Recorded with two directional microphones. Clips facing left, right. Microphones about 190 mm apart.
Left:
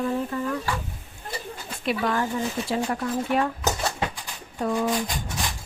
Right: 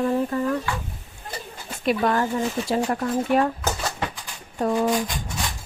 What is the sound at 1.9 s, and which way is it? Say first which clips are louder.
A woman's voice: right 3 dB; 40° right (ahead or behind).